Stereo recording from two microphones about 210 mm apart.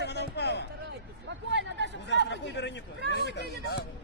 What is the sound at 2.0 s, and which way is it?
A man's voice, 55° left (ahead or behind).